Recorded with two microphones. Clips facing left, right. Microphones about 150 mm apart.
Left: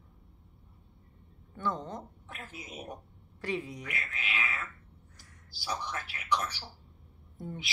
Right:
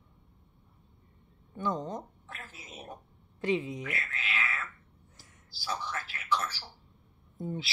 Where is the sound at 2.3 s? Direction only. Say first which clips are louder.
Left 4 dB; 15° left (ahead or behind).